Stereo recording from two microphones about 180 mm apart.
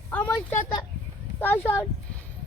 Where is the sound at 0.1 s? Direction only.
10° left (ahead or behind).